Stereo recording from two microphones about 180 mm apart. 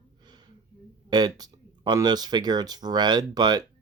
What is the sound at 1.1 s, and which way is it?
Speech, 20° right (ahead or behind).